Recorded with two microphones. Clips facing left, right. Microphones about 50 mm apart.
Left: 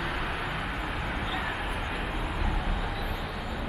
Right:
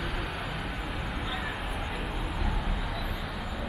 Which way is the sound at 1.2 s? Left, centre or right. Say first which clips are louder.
Left 2 dB; centre.